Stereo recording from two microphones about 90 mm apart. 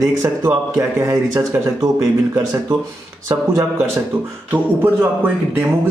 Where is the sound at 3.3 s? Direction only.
30° right (ahead or behind).